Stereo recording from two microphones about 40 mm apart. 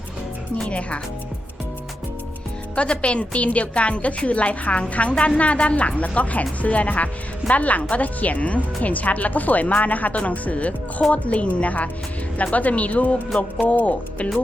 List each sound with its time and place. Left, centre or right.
0.7 s a woman's voice: left
2.7 s a woman's voice: left